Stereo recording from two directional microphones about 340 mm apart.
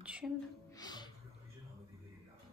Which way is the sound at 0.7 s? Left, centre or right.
Centre.